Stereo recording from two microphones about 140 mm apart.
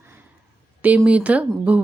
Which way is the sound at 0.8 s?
10° right (ahead or behind).